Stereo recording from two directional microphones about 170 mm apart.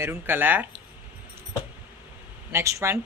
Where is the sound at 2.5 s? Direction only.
15° right (ahead or behind).